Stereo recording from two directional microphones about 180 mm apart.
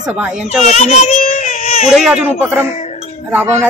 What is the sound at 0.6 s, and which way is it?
Baby cry, 40° left (ahead or behind).